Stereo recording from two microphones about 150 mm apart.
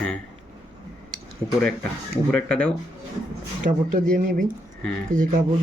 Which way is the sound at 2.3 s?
5° left (ahead or behind).